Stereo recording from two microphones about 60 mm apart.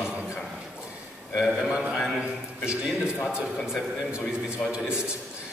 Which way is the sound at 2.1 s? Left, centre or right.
Centre.